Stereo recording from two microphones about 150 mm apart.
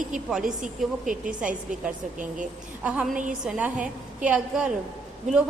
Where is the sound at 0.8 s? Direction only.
Centre (ahead or behind).